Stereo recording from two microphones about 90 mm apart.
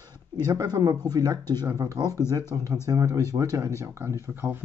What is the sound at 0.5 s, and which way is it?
Speech, 45° right (ahead or behind).